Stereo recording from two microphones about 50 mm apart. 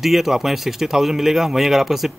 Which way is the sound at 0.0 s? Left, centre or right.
Centre.